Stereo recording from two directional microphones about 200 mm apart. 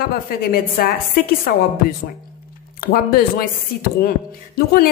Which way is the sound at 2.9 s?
50° left (ahead or behind).